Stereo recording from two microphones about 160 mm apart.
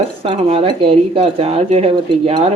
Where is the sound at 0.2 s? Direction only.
35° right (ahead or behind).